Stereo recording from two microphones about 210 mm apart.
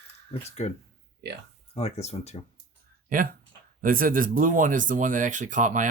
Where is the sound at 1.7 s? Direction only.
30° left (ahead or behind).